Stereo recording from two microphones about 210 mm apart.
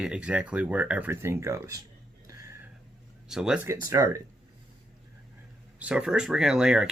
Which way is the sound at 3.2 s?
5° right (ahead or behind).